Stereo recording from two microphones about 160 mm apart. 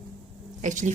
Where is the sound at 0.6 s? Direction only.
50° right (ahead or behind).